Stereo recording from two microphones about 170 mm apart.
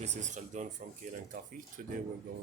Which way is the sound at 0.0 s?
45° right (ahead or behind).